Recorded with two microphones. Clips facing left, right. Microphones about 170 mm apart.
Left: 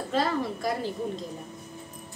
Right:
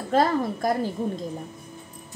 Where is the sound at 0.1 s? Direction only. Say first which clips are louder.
Right 6 dB; 45° right (ahead or behind).